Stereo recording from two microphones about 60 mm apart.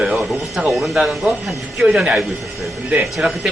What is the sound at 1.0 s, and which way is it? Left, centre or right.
A man's voice, centre.